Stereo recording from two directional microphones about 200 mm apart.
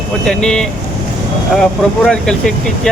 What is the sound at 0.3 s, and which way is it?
Speech, 5° left (ahead or behind).